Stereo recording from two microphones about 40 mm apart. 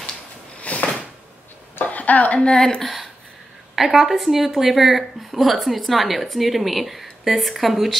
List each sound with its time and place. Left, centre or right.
0.6 s a sound: left
2.3 s a woman's voice: left
2.8 s a woman's voice: centre